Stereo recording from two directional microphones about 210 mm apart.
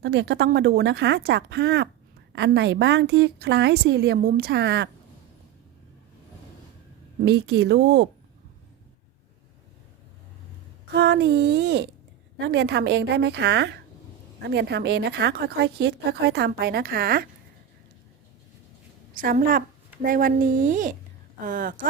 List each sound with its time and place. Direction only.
0.0 s a woman's voice: 55° right (ahead or behind)
7.2 s a woman's voice: 50° right (ahead or behind)
10.9 s a woman's voice: 50° right (ahead or behind)
19.1 s speech: 40° right (ahead or behind)